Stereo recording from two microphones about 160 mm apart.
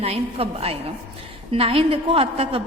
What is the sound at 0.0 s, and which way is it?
A woman's voice, 40° right (ahead or behind).